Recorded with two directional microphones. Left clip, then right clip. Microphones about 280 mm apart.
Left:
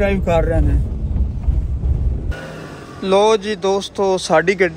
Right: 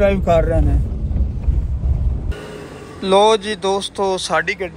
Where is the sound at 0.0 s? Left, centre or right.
Centre.